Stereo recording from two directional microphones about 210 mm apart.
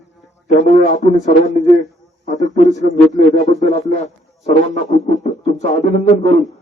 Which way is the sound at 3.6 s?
35° left (ahead or behind).